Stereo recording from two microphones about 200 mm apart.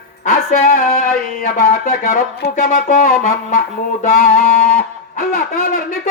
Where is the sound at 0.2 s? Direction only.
40° left (ahead or behind).